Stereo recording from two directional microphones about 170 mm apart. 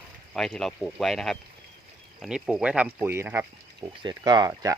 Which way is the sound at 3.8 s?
25° right (ahead or behind).